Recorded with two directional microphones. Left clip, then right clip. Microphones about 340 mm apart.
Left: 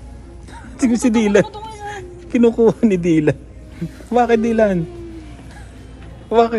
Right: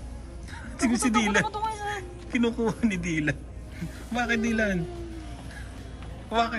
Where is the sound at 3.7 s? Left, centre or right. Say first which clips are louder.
Left 14 dB; centre.